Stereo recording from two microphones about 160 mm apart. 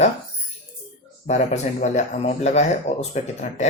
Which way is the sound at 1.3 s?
45° left (ahead or behind).